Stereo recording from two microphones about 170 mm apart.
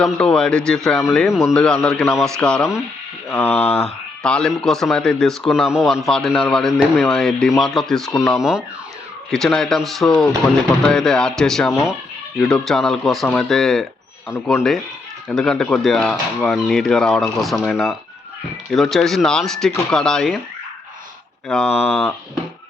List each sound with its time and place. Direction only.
0.0 s a man's voice: 5° left (ahead or behind)
3.6 s speech: 40° left (ahead or behind)
4.2 s a man's voice: 5° left (ahead or behind)
8.1 s speech: 15° left (ahead or behind)
8.4 s a man's voice: 5° right (ahead or behind)
21.4 s a man's voice: centre (ahead or behind)
21.7 s speech: 35° left (ahead or behind)